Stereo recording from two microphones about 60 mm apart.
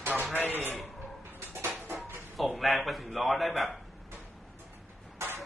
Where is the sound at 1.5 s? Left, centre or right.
Right.